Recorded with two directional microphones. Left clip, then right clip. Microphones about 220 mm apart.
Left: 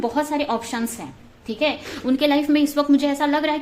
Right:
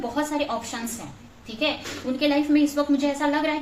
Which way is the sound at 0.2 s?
50° left (ahead or behind).